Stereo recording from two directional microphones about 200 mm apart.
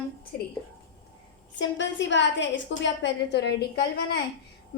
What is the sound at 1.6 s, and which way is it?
A woman's voice, 65° left (ahead or behind).